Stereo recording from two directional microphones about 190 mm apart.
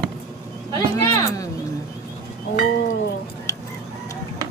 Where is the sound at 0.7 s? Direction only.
15° left (ahead or behind).